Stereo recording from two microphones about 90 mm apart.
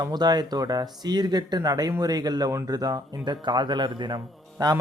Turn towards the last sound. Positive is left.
turn(degrees=-50)  # may be behind; listen again after turning